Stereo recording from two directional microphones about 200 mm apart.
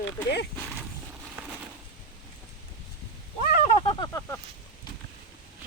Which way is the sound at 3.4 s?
45° left (ahead or behind).